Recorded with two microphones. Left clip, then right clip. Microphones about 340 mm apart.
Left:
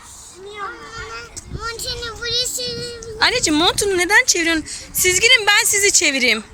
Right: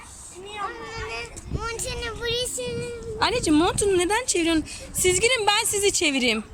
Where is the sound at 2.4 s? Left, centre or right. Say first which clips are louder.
Left 5 dB; centre.